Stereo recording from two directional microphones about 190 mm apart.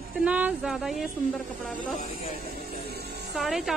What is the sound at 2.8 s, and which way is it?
Music, 55° right (ahead or behind).